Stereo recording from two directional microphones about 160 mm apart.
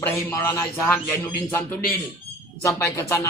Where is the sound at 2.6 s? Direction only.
15° left (ahead or behind).